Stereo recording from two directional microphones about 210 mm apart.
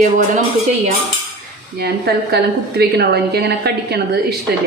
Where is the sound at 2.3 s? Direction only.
50° right (ahead or behind).